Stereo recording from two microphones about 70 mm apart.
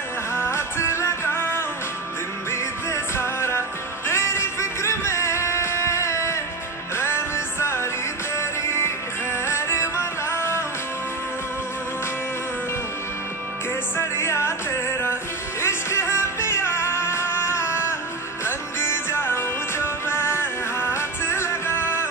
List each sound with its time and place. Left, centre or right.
0.3 s music: left
13.9 s music: left
15.6 s music: left